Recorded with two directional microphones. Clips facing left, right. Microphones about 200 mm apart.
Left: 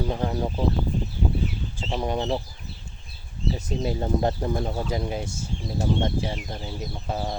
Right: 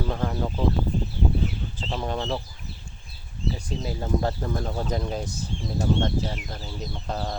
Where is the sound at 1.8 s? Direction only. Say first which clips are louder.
Left 3 dB; 10° left (ahead or behind).